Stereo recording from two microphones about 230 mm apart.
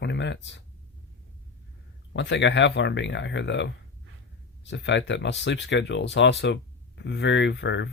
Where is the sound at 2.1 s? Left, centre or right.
Left.